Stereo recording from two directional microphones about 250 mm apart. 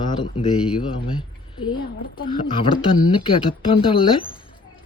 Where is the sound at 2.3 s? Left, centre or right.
Centre.